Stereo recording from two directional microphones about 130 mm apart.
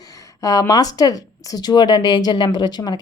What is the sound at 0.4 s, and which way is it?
Speech, 25° left (ahead or behind).